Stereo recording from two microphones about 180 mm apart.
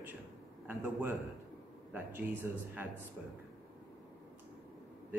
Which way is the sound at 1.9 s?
10° right (ahead or behind).